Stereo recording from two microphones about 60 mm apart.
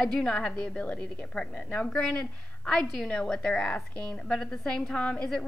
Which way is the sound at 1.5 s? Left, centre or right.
Left.